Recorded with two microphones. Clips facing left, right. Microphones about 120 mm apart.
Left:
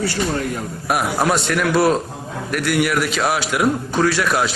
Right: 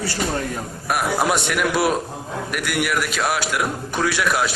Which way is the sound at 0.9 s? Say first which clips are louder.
Left 2 dB; 5° right (ahead or behind).